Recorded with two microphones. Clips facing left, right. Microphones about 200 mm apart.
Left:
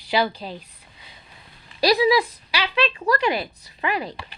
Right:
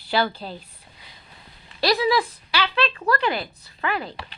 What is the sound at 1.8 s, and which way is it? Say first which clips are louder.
Speech: left 3 dB; 15° left (ahead or behind).